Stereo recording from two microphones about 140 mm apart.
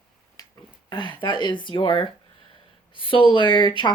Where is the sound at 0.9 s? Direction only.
35° left (ahead or behind).